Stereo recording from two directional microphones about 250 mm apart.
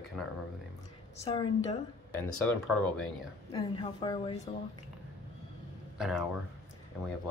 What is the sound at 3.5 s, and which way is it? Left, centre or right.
Speech, centre.